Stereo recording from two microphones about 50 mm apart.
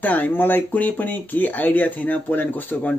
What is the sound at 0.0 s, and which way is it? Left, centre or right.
Speech, left.